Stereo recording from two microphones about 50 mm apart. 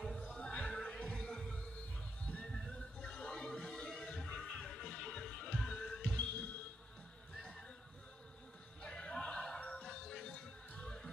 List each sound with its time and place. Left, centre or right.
0.2 s music: left
6.0 s music: left
8.8 s music: centre